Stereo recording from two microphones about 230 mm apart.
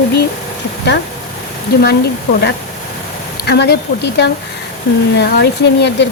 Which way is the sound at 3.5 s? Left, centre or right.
Left.